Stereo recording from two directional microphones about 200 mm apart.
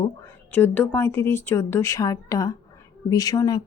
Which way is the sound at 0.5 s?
10° left (ahead or behind).